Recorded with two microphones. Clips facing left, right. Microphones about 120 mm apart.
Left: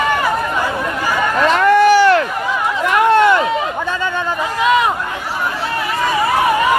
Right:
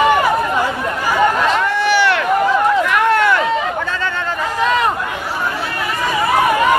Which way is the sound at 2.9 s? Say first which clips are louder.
Left 3 dB; 25° left (ahead or behind).